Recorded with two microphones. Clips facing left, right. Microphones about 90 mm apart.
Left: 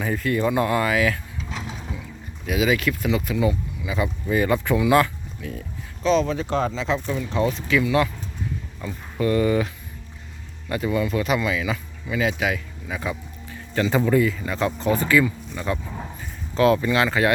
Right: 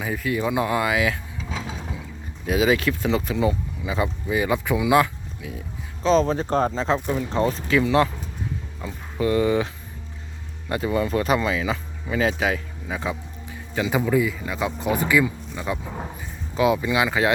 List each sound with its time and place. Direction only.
0.0 s speech: 5° right (ahead or behind)
2.5 s speech: 35° right (ahead or behind)
4.3 s speech: 10° right (ahead or behind)
6.0 s speech: 35° right (ahead or behind)
8.8 s speech: 20° right (ahead or behind)
10.7 s speech: 25° right (ahead or behind)